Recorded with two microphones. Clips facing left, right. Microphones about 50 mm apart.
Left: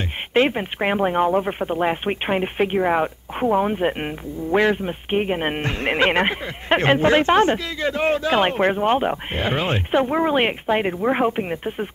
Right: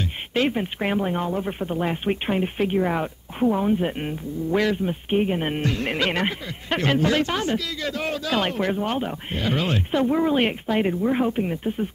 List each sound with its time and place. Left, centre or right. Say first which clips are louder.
0.3 s speech: left 4 dB; left